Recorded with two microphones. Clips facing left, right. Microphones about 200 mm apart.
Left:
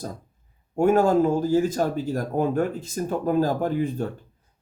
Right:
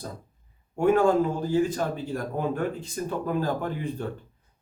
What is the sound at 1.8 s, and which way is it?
Speech, 40° left (ahead or behind).